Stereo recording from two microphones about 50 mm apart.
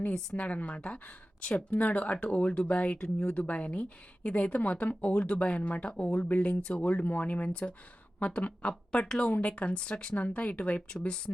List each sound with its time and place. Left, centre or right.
0.1 s speech: left